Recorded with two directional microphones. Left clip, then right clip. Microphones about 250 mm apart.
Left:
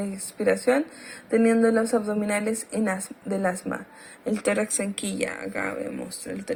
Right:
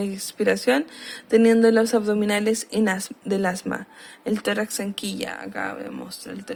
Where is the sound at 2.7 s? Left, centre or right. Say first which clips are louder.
Right 4 dB; right.